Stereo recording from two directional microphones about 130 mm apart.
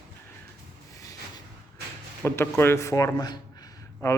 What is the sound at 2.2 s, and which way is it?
A man's voice, 20° left (ahead or behind).